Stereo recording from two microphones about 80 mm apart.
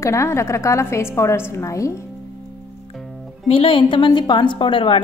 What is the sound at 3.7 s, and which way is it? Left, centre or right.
A woman's voice, left.